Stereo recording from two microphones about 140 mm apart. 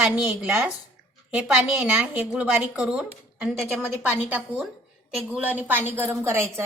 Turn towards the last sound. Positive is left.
turn(degrees=-20)  # may be behind; listen again after turning